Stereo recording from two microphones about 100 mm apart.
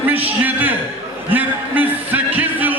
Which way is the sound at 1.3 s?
20° right (ahead or behind).